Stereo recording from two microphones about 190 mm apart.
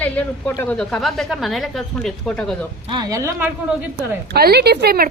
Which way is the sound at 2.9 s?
20° right (ahead or behind).